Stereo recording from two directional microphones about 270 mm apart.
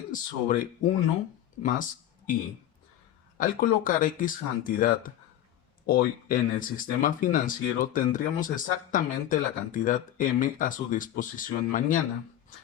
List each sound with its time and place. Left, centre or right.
0.1 s speech: left
3.3 s speech: left